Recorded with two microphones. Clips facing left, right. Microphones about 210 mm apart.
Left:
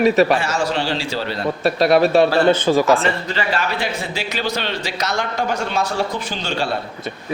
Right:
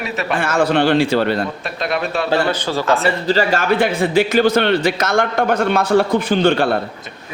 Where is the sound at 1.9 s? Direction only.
30° left (ahead or behind).